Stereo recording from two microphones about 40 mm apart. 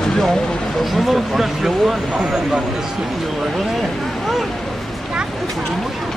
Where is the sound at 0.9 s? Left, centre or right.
Centre.